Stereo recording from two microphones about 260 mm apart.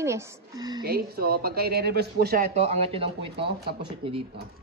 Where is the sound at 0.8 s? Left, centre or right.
Right.